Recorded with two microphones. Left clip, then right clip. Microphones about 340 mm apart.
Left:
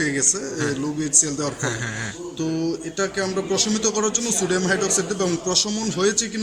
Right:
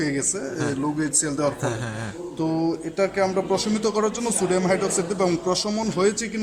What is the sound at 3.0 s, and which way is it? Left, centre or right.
A man's voice, centre.